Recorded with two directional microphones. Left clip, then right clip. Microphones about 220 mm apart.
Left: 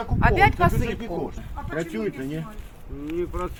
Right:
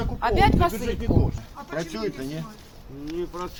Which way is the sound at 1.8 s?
10° left (ahead or behind).